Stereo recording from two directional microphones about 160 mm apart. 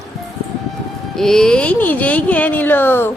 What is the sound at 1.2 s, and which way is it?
Speech, 5° left (ahead or behind).